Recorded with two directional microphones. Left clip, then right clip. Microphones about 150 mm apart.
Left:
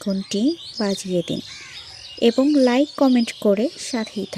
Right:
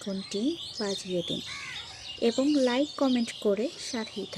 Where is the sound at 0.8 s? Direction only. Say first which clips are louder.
Left 8 dB; 75° left (ahead or behind).